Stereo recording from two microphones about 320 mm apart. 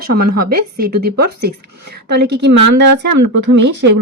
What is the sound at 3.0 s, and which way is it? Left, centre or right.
Speech, right.